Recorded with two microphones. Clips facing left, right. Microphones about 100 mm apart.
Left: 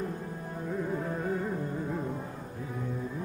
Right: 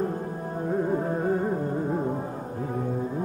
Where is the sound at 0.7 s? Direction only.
40° right (ahead or behind).